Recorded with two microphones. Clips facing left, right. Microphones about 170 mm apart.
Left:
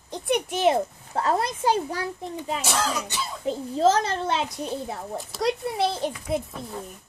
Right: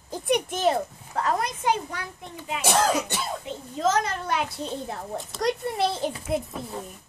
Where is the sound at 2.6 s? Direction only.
55° right (ahead or behind).